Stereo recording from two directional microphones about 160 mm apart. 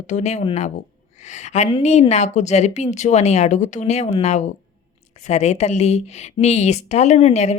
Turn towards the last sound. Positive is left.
turn(degrees=45)  # may be behind; listen again after turning